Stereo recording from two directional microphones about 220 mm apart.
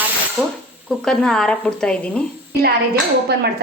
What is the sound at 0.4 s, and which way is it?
Speech, centre (ahead or behind).